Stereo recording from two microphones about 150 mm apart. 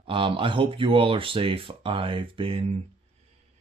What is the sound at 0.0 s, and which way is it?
Speech, 35° right (ahead or behind).